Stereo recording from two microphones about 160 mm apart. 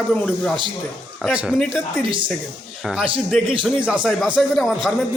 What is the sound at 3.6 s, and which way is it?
Speech, 5° right (ahead or behind).